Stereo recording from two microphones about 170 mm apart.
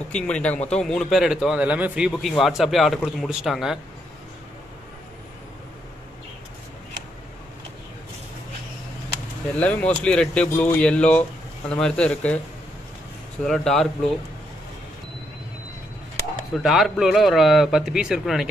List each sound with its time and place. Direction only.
0.1 s a man's voice: 5° left (ahead or behind)
9.6 s a man's voice: 10° left (ahead or behind)
13.4 s a man's voice: centre (ahead or behind)
16.5 s a man's voice: centre (ahead or behind)